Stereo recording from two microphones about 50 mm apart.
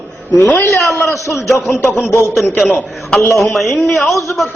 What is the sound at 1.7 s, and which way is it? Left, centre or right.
Speech, left.